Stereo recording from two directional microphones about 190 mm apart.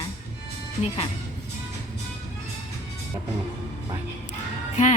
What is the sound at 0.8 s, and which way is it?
Speech, 30° left (ahead or behind).